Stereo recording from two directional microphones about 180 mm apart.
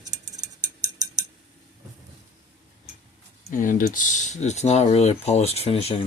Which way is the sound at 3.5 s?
50° left (ahead or behind).